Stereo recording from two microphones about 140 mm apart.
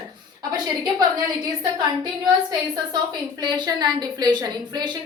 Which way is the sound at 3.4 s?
30° right (ahead or behind).